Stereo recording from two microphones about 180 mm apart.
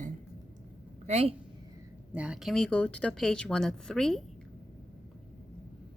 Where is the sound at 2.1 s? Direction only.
5° right (ahead or behind).